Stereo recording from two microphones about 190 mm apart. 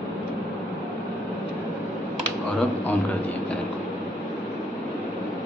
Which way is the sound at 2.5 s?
10° left (ahead or behind).